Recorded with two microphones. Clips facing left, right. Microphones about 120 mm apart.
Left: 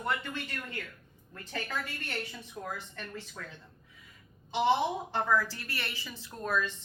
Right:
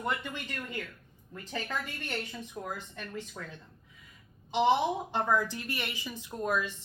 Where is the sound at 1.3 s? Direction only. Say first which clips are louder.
Right 1 dB; 15° right (ahead or behind).